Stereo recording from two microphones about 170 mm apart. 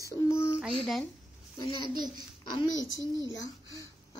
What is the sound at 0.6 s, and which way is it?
Speech, centre (ahead or behind).